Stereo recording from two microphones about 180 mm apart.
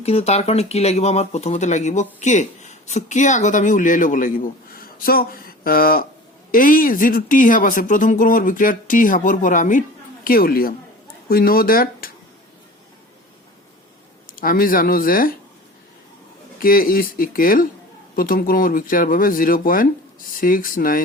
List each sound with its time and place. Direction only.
0.0 s speech: 35° left (ahead or behind); by 12.1 s 55° left (ahead or behind)
14.3 s speech: 50° left (ahead or behind)
16.6 s speech: 50° left (ahead or behind)